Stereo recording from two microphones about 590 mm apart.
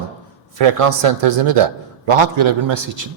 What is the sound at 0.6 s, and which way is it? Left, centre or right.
A man's voice, right.